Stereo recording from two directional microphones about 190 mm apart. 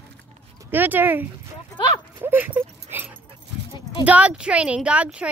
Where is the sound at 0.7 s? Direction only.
10° right (ahead or behind).